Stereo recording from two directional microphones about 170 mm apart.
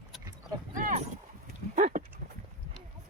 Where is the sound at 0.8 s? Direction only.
50° right (ahead or behind).